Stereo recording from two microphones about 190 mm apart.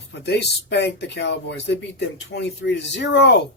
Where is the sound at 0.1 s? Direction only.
60° left (ahead or behind).